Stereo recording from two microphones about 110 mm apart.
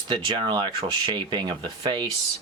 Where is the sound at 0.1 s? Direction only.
40° right (ahead or behind).